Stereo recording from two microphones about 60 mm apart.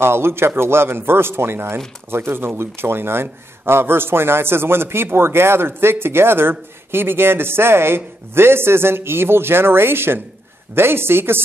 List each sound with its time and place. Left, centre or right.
0.0 s a man's voice: right